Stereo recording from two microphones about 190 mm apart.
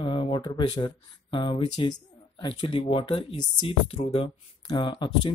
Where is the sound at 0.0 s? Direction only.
25° left (ahead or behind).